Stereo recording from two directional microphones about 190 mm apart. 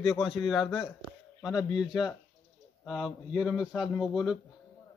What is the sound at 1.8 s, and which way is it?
Speech, 5° right (ahead or behind).